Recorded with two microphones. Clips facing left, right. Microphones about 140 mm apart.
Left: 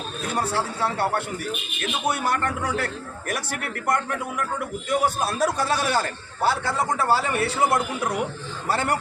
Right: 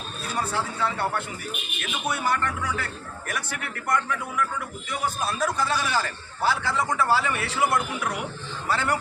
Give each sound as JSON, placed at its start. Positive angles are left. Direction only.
{"t": 0.8, "sound": "a man's voice", "side_deg": 40}
{"t": 8.7, "sound": "a man's voice", "side_deg": 55}